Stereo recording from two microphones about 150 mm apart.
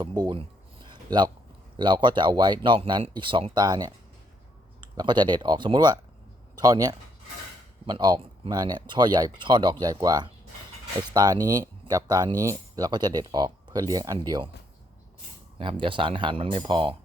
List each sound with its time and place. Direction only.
0.0 s a sound: 30° right (ahead or behind)
1.7 s speech: 30° right (ahead or behind)
15.5 s speech: 35° right (ahead or behind)